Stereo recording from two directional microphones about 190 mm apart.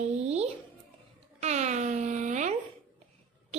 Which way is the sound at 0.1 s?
35° right (ahead or behind).